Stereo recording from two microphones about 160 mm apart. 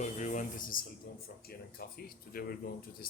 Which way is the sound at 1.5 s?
70° left (ahead or behind).